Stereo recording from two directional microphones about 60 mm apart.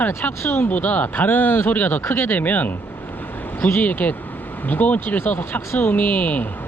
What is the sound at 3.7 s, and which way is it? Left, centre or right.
Speech, left.